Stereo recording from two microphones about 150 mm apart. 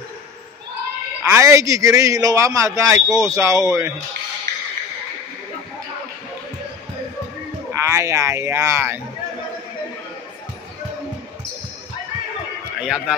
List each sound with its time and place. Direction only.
1.2 s a man's voice: 15° right (ahead or behind)
7.7 s a man's voice: 20° right (ahead or behind)
12.8 s speech: 5° right (ahead or behind)